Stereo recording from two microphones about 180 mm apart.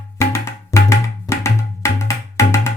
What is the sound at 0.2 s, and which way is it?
Music, 15° left (ahead or behind).